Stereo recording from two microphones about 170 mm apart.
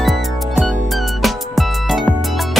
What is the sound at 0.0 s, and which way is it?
Music, centre (ahead or behind).